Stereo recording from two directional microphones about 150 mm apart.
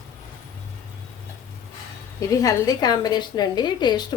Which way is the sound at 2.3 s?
25° left (ahead or behind).